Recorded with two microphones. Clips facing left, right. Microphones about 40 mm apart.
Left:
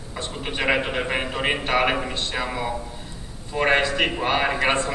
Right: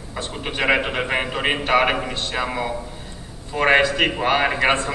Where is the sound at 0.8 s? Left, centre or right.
Centre.